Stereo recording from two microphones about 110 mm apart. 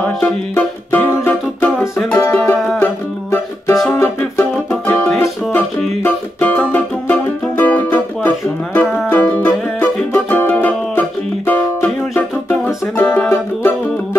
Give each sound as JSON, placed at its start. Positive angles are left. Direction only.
{"t": 0.0, "sound": "music", "side_deg": 10}